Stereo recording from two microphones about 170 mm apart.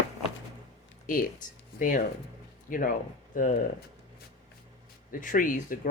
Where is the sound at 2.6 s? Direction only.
55° left (ahead or behind).